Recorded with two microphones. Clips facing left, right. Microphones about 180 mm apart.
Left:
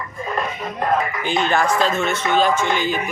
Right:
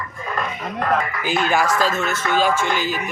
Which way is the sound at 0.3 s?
20° left (ahead or behind).